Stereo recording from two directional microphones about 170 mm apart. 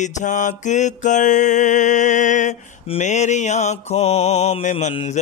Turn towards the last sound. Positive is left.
turn(degrees=40)  # may be behind; listen again after turning